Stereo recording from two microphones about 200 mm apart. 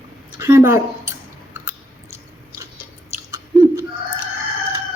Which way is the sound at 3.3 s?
15° right (ahead or behind).